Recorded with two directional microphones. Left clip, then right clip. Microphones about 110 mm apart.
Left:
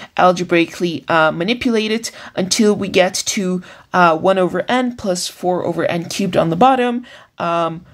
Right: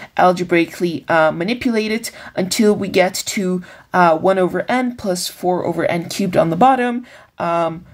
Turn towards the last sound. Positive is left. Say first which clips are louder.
# even
turn(degrees=25)  # may be behind; listen again after turning